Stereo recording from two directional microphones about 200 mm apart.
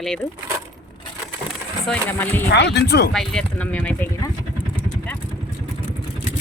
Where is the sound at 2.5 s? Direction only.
60° left (ahead or behind).